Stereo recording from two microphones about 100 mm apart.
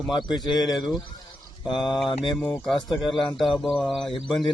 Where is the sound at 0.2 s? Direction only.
45° left (ahead or behind).